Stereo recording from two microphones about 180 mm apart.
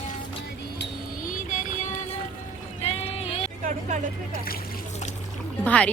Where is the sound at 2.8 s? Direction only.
35° left (ahead or behind).